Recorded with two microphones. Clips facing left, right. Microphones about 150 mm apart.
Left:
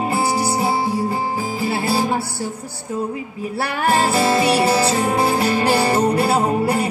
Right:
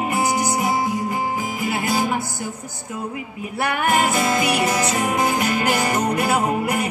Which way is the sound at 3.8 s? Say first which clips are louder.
Left 4 dB; 30° left (ahead or behind).